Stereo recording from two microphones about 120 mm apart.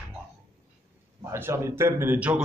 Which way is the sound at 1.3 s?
20° right (ahead or behind).